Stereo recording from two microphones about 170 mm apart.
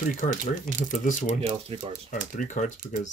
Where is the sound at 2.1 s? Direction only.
50° left (ahead or behind).